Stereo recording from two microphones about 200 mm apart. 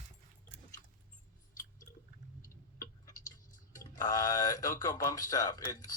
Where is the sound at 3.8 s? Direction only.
20° left (ahead or behind).